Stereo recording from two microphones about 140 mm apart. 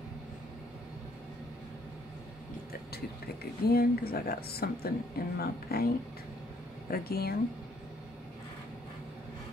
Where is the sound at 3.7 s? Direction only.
90° left.